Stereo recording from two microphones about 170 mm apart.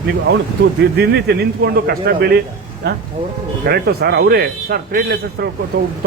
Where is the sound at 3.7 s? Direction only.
70° right (ahead or behind).